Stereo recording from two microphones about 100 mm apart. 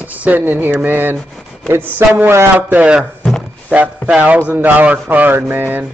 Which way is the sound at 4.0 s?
10° right (ahead or behind).